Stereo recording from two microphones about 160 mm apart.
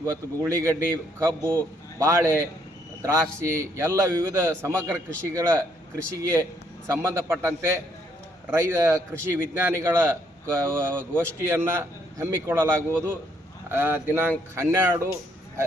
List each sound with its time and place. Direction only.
0.0 s a man's voice: 15° right (ahead or behind)
6.8 s a man's voice: 20° right (ahead or behind)